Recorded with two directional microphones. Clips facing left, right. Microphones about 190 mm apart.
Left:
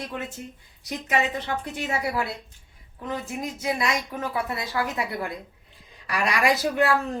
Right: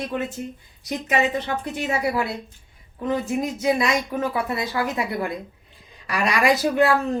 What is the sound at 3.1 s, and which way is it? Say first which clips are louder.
Speech: right 7 dB; 20° right (ahead or behind).